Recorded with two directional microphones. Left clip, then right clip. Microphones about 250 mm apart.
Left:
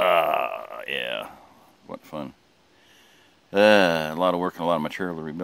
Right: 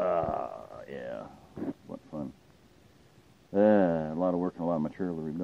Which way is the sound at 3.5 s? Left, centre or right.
Centre.